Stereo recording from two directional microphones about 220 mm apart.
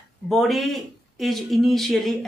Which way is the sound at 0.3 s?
Centre (ahead or behind).